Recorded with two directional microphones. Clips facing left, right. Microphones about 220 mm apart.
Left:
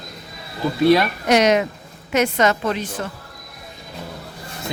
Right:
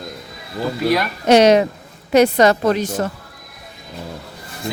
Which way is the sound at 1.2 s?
30° right (ahead or behind).